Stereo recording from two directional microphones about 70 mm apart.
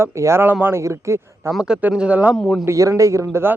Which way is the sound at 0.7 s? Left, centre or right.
Right.